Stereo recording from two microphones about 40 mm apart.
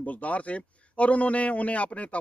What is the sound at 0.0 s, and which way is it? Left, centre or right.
A man's voice, left.